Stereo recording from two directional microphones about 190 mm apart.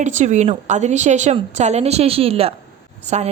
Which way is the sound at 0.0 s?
40° right (ahead or behind).